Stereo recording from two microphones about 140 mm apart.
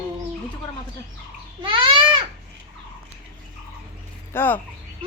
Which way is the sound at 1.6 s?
40° right (ahead or behind).